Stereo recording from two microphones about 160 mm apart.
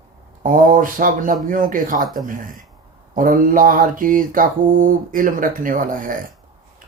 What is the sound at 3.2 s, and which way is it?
Speech, 55° right (ahead or behind).